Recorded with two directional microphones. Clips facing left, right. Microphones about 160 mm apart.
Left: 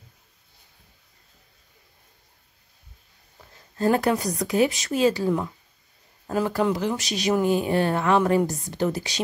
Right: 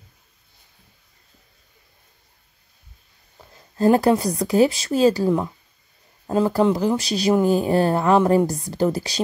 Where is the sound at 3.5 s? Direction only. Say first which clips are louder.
Right 5 dB; 35° right (ahead or behind).